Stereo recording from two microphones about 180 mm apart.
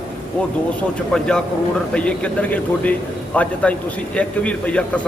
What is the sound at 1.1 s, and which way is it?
A man's voice, 5° left (ahead or behind).